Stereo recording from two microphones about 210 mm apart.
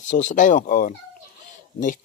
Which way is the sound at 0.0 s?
35° left (ahead or behind).